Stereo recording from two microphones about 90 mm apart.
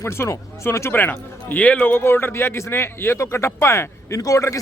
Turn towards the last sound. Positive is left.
turn(degrees=35)  # may be behind; listen again after turning